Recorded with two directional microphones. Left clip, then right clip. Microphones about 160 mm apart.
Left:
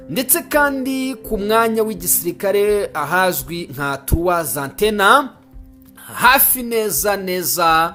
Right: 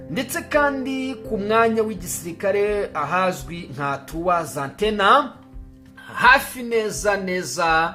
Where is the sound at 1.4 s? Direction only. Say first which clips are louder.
Left 3 dB; 40° left (ahead or behind).